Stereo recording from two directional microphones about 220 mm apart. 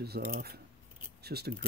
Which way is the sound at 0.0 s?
45° right (ahead or behind).